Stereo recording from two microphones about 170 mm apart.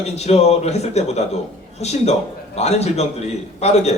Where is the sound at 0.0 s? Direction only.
40° left (ahead or behind).